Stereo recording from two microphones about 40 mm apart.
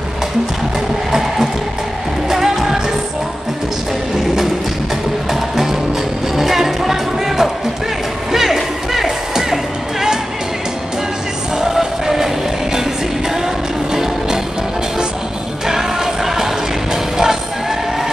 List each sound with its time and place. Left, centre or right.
2.2 s music: centre
5.3 s music: centre
11.5 s music: centre
13.9 s music: centre
15.6 s music: centre